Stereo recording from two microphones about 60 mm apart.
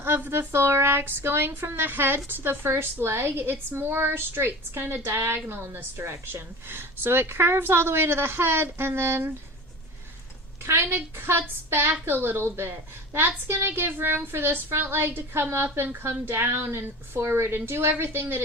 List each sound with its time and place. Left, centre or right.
0.0 s speech: right
10.6 s a woman's voice: right